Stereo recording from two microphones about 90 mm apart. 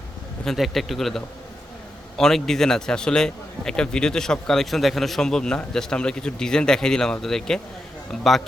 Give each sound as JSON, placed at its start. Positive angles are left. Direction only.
{"t": 0.4, "sound": "a man's voice", "side_deg": 0}